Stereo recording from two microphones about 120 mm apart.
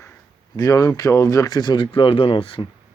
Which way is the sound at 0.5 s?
30° left (ahead or behind).